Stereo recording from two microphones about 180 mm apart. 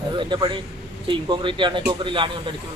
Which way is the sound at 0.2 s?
25° right (ahead or behind).